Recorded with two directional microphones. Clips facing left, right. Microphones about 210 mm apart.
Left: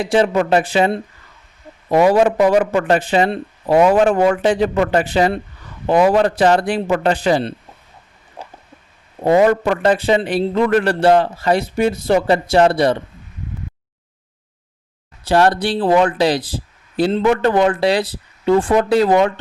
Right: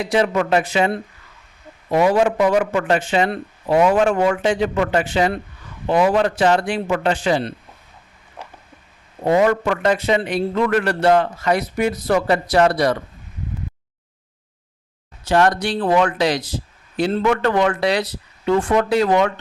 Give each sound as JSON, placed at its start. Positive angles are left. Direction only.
{"t": 0.0, "sound": "speech", "side_deg": 30}
{"t": 8.4, "sound": "a sound", "side_deg": 30}
{"t": 9.2, "sound": "a man's voice", "side_deg": 35}
{"t": 15.2, "sound": "speech", "side_deg": 35}